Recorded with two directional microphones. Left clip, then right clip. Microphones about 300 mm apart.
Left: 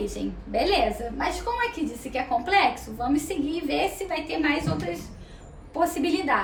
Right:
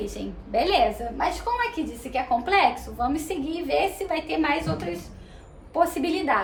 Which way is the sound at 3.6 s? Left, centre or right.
Centre.